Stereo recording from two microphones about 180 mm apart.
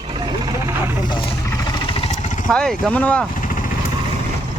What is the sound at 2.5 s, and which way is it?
Speech, 5° left (ahead or behind).